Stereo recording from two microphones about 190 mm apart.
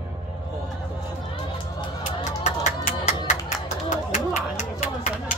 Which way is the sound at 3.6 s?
40° left (ahead or behind).